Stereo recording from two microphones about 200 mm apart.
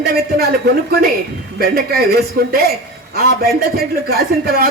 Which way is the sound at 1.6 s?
50° right (ahead or behind).